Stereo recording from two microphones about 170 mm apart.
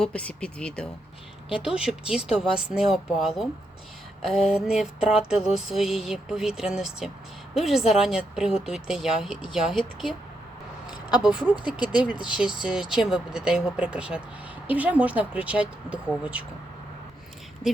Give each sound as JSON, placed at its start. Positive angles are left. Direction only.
{"t": 0.0, "sound": "speech", "side_deg": 5}
{"t": 1.6, "sound": "a sound", "side_deg": -5}
{"t": 11.2, "sound": "speech", "side_deg": -5}
{"t": 11.6, "sound": "speech", "side_deg": 25}
{"t": 12.4, "sound": "a sound", "side_deg": -5}
{"t": 14.7, "sound": "speech", "side_deg": -10}